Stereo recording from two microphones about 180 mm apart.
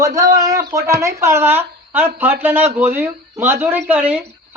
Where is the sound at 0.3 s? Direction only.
20° right (ahead or behind).